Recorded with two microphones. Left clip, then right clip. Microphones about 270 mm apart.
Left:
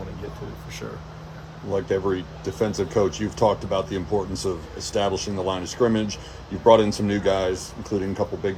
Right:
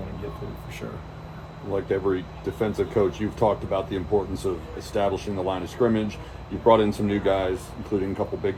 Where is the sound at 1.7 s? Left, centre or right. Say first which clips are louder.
Left 1 dB; left.